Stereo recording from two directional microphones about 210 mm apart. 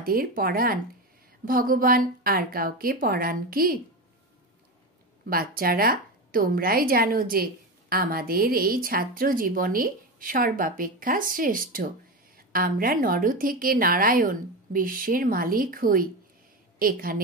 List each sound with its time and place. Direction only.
0.0 s a woman's voice: 45° right (ahead or behind)
5.2 s a woman's voice: 45° right (ahead or behind)